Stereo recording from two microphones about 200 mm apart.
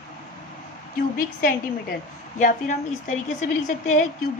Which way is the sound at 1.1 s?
40° left (ahead or behind).